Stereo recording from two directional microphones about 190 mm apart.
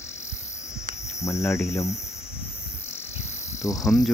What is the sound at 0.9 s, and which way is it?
Cricket, 45° right (ahead or behind).